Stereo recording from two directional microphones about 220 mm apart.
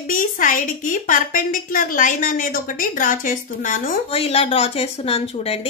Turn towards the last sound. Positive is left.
turn(degrees=25)  # may be behind; listen again after turning